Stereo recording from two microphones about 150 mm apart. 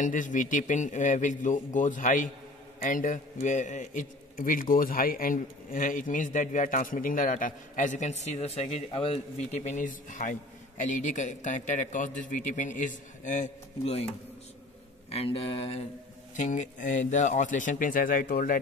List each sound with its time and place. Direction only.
0.0 s a man's voice: 60° left (ahead or behind); by 15.8 s 40° left (ahead or behind)
16.3 s a man's voice: 55° left (ahead or behind)